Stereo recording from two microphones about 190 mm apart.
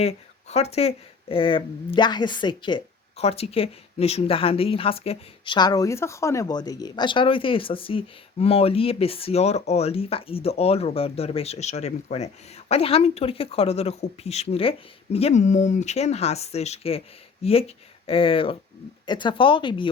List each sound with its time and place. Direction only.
0.0 s speech: 35° left (ahead or behind)